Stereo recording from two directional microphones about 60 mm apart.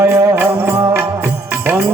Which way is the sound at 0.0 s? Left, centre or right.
Right.